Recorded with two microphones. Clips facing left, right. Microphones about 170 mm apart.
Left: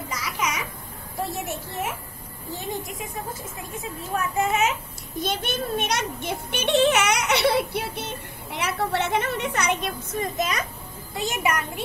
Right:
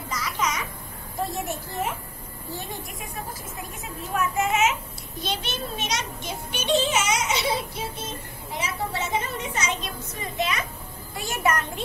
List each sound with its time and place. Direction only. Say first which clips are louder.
0.1 s babbling: right 2 dB; 10° left (ahead or behind)
2.5 s speech: left 4 dB; 20° left (ahead or behind)
3.7 s speech: left 1 dB; 35° left (ahead or behind)
5.2 s speech: left 4 dB; 50° left (ahead or behind)
11.1 s a child's voice: even; 20° left (ahead or behind)